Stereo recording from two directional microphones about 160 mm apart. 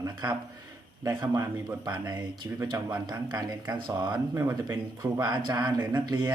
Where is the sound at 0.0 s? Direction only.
25° right (ahead or behind).